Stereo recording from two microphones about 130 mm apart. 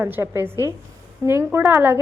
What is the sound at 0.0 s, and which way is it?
A woman's voice, 20° right (ahead or behind).